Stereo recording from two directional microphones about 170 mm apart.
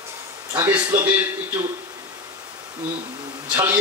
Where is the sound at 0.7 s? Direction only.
10° right (ahead or behind).